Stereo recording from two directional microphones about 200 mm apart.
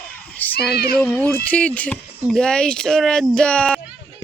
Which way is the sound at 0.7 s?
50° left (ahead or behind).